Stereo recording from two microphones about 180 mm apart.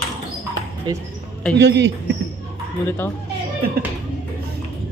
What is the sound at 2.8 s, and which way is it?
Speech, 10° left (ahead or behind).